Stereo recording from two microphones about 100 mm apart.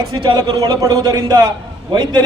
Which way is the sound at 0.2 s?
50° right (ahead or behind).